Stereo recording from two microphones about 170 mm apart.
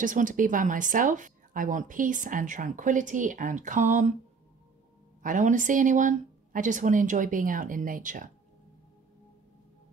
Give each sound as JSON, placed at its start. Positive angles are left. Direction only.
{"t": 0.0, "sound": "speech", "side_deg": -50}
{"t": 5.2, "sound": "speech", "side_deg": -50}